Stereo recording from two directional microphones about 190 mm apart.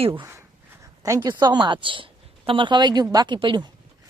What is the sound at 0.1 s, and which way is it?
A woman's voice, 15° right (ahead or behind).